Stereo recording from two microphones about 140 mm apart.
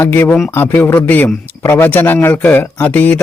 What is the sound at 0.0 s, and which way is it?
A man's voice, 15° left (ahead or behind).